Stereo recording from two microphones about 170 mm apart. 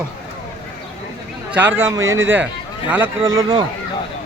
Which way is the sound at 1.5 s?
10° right (ahead or behind).